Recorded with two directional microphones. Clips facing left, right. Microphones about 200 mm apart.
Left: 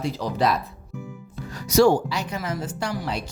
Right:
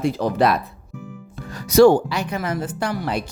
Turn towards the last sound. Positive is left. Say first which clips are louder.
# right 4 dB
turn(degrees=-55)  # may be behind; listen again after turning